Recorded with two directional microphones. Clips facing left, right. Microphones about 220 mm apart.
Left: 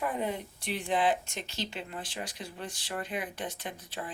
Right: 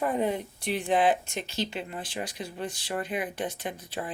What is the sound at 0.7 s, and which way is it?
Speech, 15° right (ahead or behind).